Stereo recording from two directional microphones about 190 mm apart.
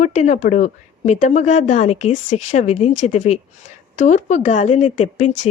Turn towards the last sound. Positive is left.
turn(degrees=40)  # may be behind; listen again after turning